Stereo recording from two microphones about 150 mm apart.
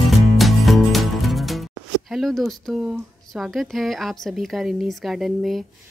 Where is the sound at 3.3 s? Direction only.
Centre (ahead or behind).